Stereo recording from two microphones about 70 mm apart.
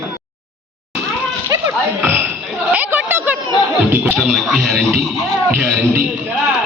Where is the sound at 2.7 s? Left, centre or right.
Right.